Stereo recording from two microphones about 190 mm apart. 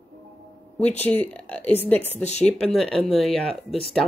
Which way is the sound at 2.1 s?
35° left (ahead or behind).